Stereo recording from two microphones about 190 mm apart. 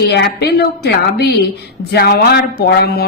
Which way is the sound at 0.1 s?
60° left (ahead or behind).